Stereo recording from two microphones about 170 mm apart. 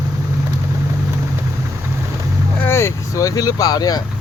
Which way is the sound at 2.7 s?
15° left (ahead or behind).